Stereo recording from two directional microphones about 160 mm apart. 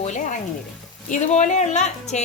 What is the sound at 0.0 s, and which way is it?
Frying, 50° left (ahead or behind).